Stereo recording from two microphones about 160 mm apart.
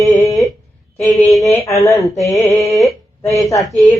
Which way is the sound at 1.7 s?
20° left (ahead or behind).